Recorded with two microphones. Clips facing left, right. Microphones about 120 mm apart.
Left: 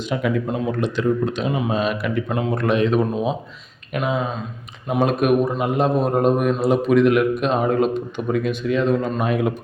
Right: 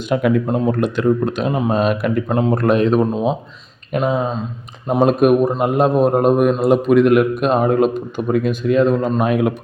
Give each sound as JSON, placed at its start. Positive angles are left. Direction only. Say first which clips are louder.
{"t": 0.1, "sound": "a man's voice", "louder": "right 6 dB", "side_deg": -50}